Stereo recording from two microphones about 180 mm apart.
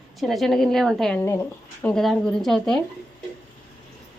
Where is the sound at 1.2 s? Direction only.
15° left (ahead or behind).